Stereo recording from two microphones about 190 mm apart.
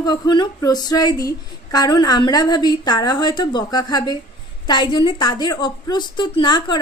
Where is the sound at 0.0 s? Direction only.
20° left (ahead or behind).